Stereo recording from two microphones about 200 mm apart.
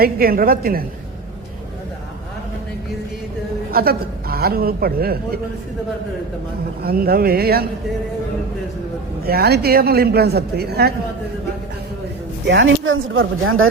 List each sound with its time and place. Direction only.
0.0 s a man's voice: 50° right (ahead or behind)
3.7 s a man's voice: 50° right (ahead or behind)
6.8 s a man's voice: 50° right (ahead or behind)
9.2 s a man's voice: 50° right (ahead or behind)
12.5 s speech: 70° right (ahead or behind); by 13.7 s 85° right